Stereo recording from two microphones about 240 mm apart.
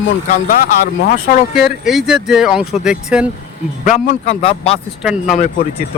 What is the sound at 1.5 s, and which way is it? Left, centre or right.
Speech, centre.